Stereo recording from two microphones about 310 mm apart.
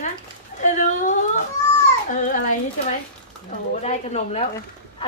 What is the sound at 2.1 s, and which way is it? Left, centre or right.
Speech, left.